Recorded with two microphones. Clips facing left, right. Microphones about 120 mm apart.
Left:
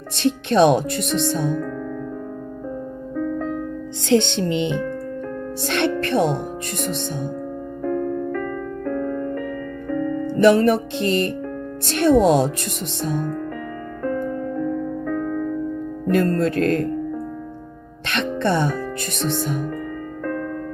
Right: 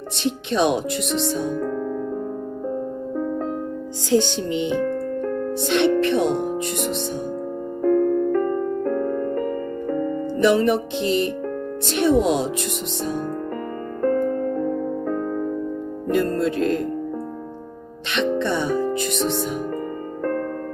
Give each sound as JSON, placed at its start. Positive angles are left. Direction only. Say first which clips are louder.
{"t": 0.5, "sound": "speech", "louder": "left 5 dB", "side_deg": 60}
{"t": 3.2, "sound": "music", "louder": "left 2 dB", "side_deg": -35}
{"t": 4.1, "sound": "music", "louder": "left 1 dB", "side_deg": 65}
{"t": 4.4, "sound": "speech", "louder": "even", "side_deg": 65}
{"t": 6.2, "sound": "music", "louder": "right 2 dB", "side_deg": -55}
{"t": 7.9, "sound": "music", "louder": "right 6 dB", "side_deg": -40}
{"t": 10.2, "sound": "speech", "louder": "left 3 dB", "side_deg": 55}
{"t": 14.0, "sound": "music", "louder": "right 4 dB", "side_deg": -40}
{"t": 16.3, "sound": "speech", "louder": "left 2 dB", "side_deg": 60}
{"t": 18.1, "sound": "music", "louder": "even", "side_deg": 55}